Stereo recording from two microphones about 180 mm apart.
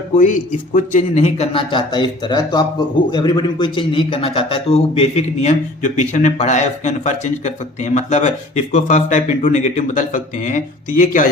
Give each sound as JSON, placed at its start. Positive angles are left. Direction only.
{"t": 0.2, "sound": "a man's voice", "side_deg": 45}